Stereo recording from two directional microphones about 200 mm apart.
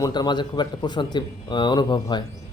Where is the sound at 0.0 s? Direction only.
20° left (ahead or behind).